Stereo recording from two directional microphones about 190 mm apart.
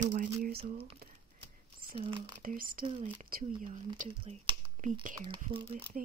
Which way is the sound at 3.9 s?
35° right (ahead or behind).